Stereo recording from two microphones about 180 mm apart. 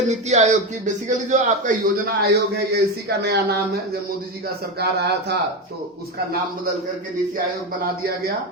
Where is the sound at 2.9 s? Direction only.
65° right (ahead or behind).